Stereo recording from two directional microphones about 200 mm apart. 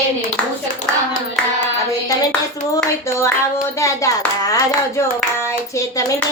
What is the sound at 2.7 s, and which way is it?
Clapping, 15° left (ahead or behind).